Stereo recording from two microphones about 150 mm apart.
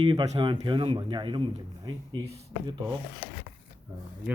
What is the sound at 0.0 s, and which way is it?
A man's voice, 35° right (ahead or behind).